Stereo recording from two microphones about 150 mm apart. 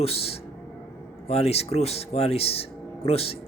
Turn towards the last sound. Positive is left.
turn(degrees=40)  # may be behind; listen again after turning